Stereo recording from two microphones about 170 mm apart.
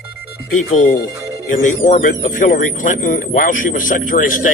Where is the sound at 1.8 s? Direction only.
50° left (ahead or behind).